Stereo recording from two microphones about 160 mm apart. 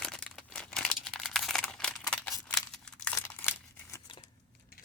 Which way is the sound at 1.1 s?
Centre (ahead or behind).